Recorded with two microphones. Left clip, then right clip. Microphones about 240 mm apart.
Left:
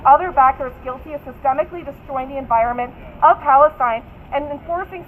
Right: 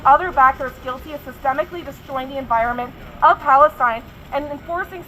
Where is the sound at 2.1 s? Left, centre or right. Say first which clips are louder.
Left 2 dB; right.